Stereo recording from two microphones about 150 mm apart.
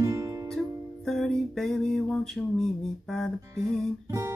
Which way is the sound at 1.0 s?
5° left (ahead or behind).